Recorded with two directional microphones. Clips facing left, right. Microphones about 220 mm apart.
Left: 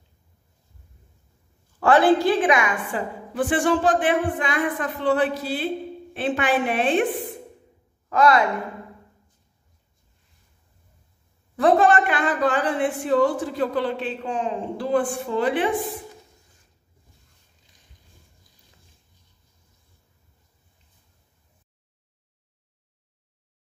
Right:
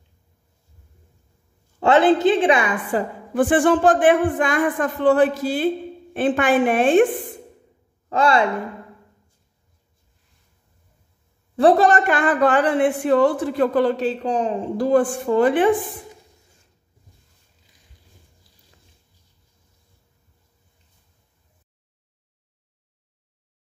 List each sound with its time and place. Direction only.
1.8 s a woman's voice: 20° right (ahead or behind)
3.3 s speech: 50° right (ahead or behind)
8.1 s a woman's voice: 30° right (ahead or behind)
11.5 s speech: 35° right (ahead or behind); by 15.7 s 50° right (ahead or behind)